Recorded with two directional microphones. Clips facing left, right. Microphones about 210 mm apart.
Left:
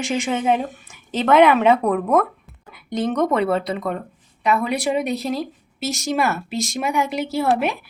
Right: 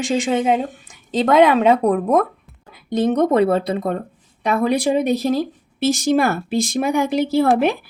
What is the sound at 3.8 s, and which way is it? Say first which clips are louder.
Speech: right 3 dB; 30° right (ahead or behind).